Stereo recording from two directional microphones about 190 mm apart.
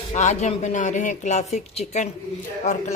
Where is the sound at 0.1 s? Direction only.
40° left (ahead or behind).